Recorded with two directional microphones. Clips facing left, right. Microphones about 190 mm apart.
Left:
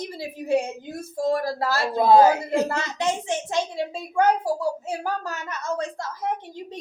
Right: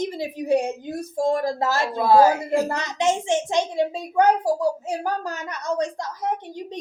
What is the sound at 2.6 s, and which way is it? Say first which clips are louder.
A woman's voice: right 3 dB; 20° right (ahead or behind).